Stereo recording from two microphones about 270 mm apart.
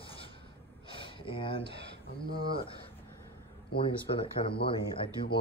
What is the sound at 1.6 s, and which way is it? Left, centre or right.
Speech, right.